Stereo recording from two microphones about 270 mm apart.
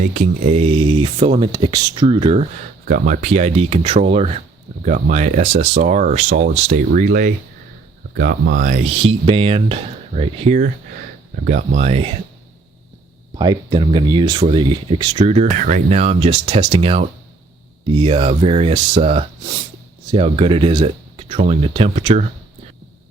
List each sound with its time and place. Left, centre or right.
0.1 s speech: right
13.3 s speech: centre